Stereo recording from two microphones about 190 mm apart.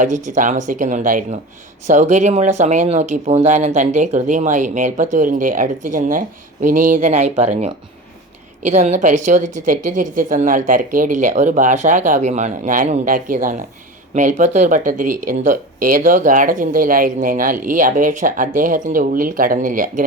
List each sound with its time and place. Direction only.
0.0 s speech: 40° right (ahead or behind)